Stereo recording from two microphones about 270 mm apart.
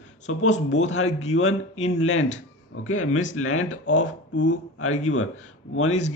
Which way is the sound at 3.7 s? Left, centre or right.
Left.